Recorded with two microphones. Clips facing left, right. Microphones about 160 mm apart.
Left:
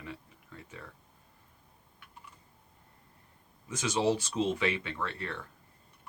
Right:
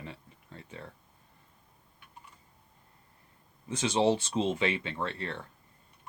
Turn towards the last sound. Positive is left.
turn(degrees=-25)  # may be behind; listen again after turning